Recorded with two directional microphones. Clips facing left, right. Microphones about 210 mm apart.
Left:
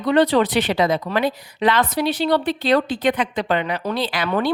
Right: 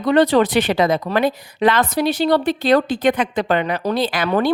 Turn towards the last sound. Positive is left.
turn(degrees=-45)  # may be behind; listen again after turning